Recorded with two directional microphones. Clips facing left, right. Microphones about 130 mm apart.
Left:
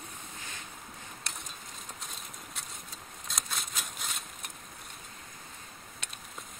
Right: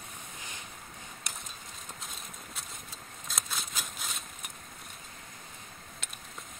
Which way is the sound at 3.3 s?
Centre (ahead or behind).